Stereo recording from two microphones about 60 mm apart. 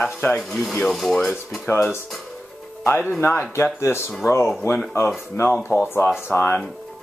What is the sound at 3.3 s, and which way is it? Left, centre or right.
Speech, left.